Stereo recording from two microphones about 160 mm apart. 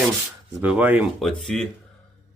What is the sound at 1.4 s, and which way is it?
Speech, 5° left (ahead or behind).